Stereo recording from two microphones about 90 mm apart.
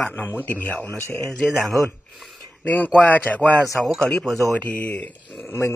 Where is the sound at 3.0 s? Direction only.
15° left (ahead or behind).